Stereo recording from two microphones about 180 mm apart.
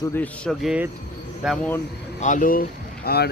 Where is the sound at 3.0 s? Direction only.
60° left (ahead or behind).